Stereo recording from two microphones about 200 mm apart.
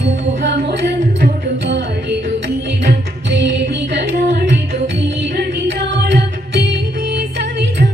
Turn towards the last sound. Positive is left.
turn(degrees=-60)  # may be behind; listen again after turning